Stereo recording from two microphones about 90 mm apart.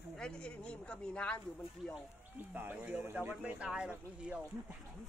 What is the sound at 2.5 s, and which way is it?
Speech, 20° right (ahead or behind).